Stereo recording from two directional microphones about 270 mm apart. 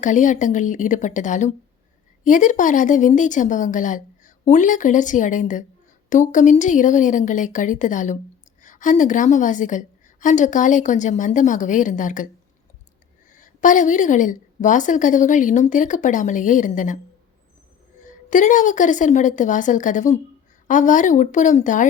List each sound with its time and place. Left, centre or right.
0.0 s a woman's voice: left
13.3 s a woman's voice: left
18.0 s a woman's voice: left